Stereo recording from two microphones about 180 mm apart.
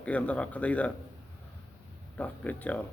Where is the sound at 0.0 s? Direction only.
10° left (ahead or behind).